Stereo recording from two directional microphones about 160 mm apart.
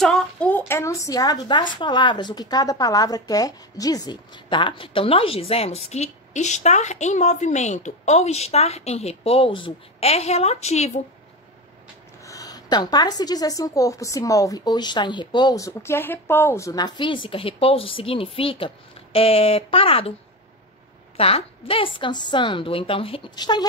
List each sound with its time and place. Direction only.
0.0 s a woman's voice: 5° left (ahead or behind); by 11.0 s 45° left (ahead or behind)
12.3 s a woman's voice: 20° left (ahead or behind)
21.2 s a woman's voice: 35° left (ahead or behind)